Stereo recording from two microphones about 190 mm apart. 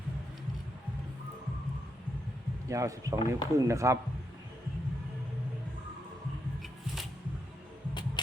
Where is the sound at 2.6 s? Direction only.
15° right (ahead or behind).